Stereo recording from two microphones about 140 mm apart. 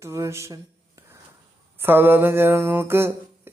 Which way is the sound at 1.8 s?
15° right (ahead or behind).